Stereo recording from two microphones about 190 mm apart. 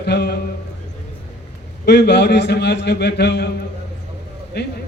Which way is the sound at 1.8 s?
65° left (ahead or behind).